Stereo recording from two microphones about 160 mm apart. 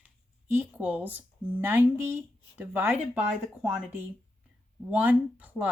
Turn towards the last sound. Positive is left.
turn(degrees=-10)  # may be behind; listen again after turning